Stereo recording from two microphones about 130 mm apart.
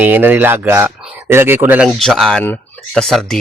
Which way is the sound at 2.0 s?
Centre (ahead or behind).